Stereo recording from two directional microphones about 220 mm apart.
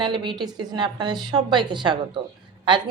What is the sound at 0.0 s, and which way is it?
A woman's voice, 20° right (ahead or behind).